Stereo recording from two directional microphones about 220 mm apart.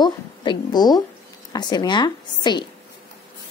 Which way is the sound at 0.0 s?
20° left (ahead or behind).